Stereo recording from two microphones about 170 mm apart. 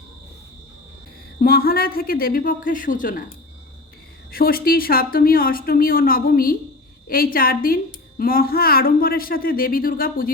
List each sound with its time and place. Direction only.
1.4 s a woman's voice: 60° left (ahead or behind)